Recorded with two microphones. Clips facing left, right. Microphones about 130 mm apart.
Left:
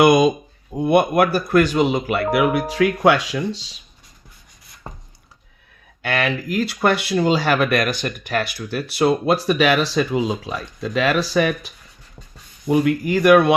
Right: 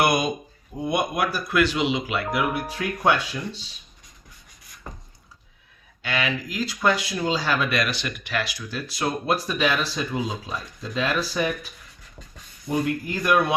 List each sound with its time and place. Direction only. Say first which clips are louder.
0.8 s speech: left 9 dB; 65° left (ahead or behind); by 3.7 s 90° left
6.0 s speech: left 5 dB; 55° left (ahead or behind); by 13.5 s 75° left (ahead or behind)